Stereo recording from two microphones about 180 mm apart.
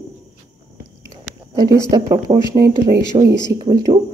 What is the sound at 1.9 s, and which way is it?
Speech, 20° right (ahead or behind).